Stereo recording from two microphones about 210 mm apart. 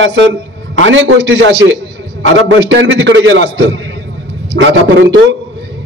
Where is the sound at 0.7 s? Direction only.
65° right (ahead or behind).